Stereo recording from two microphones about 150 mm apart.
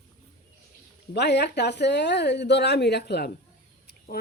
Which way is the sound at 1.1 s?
90° left.